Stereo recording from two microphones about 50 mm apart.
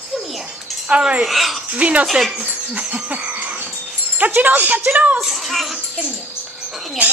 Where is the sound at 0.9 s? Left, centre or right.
Right.